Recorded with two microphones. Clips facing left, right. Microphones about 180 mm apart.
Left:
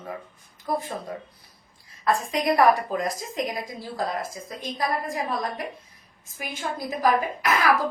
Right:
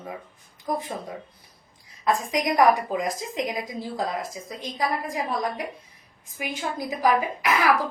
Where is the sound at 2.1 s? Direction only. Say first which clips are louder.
Left 1 dB; 15° right (ahead or behind).